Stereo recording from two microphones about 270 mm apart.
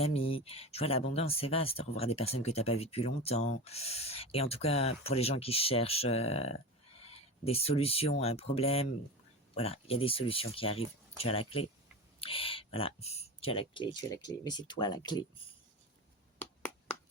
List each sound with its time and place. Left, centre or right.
0.0 s speech: left
7.0 s a sound: left
8.2 s speech: left
16.4 s finger snapping: centre